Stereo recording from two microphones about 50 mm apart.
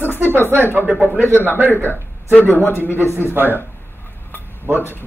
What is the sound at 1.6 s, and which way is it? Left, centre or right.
A man's voice, left.